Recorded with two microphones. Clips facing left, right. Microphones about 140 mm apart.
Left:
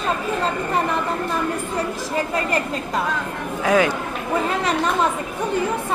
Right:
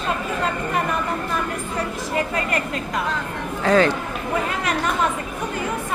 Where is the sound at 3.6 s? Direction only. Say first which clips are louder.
Right 1 dB; 10° left (ahead or behind).